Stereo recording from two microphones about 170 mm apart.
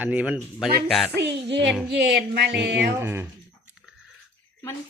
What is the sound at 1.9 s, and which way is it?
Music, 80° right.